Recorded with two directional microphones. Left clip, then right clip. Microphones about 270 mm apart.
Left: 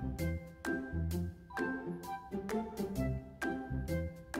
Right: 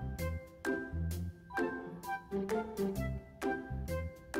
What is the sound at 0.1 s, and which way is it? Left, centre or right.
Music, centre.